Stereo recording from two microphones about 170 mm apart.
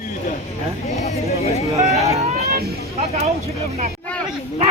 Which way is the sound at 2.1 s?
40° right (ahead or behind).